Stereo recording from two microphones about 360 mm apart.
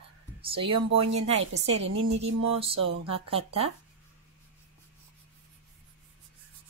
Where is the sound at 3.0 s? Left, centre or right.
Centre.